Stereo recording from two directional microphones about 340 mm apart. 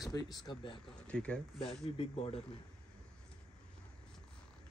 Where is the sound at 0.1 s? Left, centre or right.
Centre.